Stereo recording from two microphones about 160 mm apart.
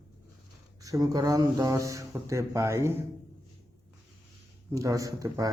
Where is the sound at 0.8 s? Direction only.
20° right (ahead or behind).